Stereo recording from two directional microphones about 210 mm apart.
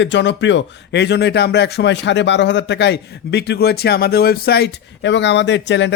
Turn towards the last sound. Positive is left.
turn(degrees=55)  # may be behind; listen again after turning